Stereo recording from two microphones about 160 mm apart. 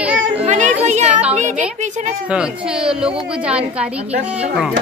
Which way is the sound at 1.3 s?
50° right (ahead or behind).